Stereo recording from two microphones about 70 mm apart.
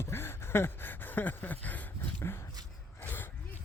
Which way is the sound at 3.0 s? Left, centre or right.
Left.